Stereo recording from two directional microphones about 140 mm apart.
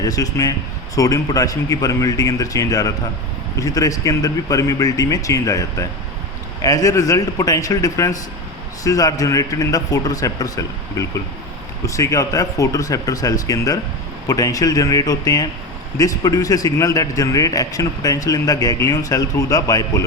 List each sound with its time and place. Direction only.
0.0 s speech: 25° left (ahead or behind)